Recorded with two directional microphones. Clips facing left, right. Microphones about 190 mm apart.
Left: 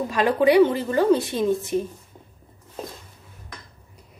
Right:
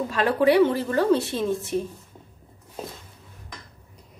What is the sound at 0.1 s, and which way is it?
A woman's voice, 15° left (ahead or behind).